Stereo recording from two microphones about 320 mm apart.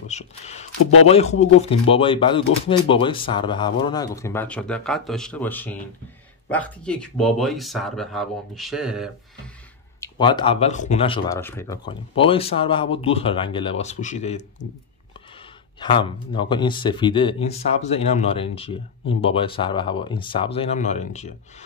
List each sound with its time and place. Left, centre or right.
0.1 s a sound: left
1.0 s speech: centre
9.9 s speech: centre
15.8 s speech: centre